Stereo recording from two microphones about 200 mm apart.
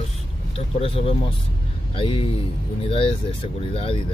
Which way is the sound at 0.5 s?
30° left (ahead or behind).